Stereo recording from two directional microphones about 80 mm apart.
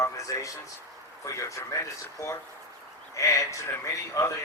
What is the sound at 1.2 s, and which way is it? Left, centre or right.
A man's voice, left.